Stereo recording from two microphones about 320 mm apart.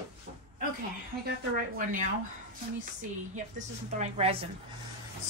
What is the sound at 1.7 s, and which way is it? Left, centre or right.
Speech, right.